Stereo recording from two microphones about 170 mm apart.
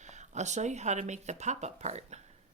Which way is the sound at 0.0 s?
45° right (ahead or behind).